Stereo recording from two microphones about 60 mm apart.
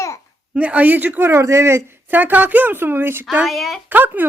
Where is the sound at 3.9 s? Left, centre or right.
Right.